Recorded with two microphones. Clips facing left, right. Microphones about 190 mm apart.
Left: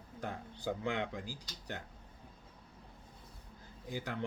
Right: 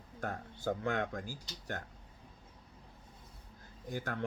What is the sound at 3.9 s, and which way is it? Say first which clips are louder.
Speech: right 1 dB; 50° right (ahead or behind).